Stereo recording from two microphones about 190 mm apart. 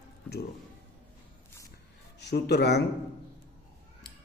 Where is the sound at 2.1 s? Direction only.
60° left (ahead or behind).